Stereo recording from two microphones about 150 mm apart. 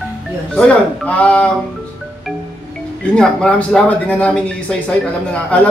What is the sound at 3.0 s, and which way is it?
Speech, 5° left (ahead or behind).